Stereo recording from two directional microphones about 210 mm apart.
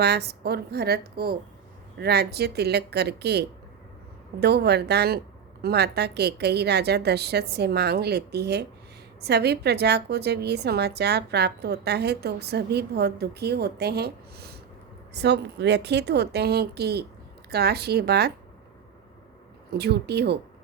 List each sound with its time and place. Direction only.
0.0 s a woman's voice: 50° right (ahead or behind)
19.7 s a woman's voice: 50° right (ahead or behind)